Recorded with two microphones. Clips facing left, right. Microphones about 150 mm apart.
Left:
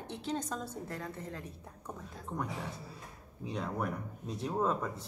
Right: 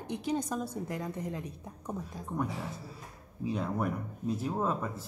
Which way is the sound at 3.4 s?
5° right (ahead or behind).